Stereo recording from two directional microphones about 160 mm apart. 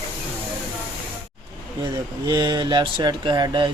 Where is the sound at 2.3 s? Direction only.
30° right (ahead or behind).